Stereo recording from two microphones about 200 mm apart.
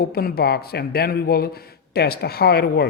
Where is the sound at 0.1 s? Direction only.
50° left (ahead or behind).